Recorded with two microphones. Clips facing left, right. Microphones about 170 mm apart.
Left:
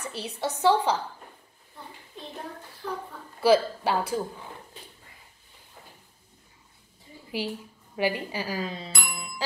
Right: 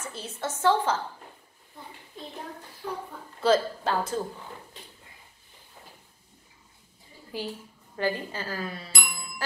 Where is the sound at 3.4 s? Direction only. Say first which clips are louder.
Left 2 dB; 10° left (ahead or behind).